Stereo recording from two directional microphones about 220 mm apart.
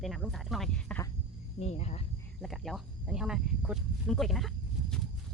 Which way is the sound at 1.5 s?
30° left (ahead or behind).